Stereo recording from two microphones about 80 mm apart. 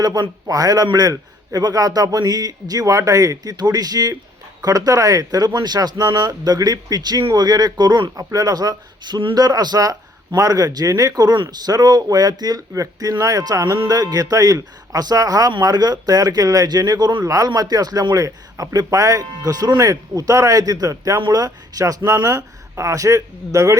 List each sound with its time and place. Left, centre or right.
0.0 s speech: right
8.2 s speech: right
17.2 s speech: right